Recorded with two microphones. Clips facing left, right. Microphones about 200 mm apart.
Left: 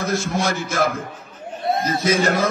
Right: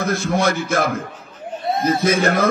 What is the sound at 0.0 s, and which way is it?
A man's voice, 55° right (ahead or behind).